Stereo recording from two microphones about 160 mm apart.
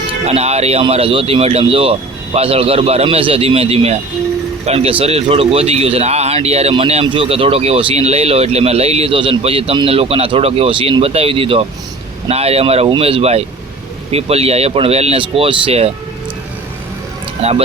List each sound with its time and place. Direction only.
0.3 s speech: 40° right (ahead or behind)
17.4 s speech: 40° right (ahead or behind)